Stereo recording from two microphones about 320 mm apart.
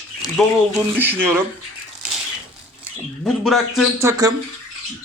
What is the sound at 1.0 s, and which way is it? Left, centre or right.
Speech, centre.